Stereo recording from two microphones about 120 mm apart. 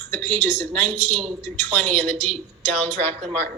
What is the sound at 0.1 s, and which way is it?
A woman's voice, 15° left (ahead or behind).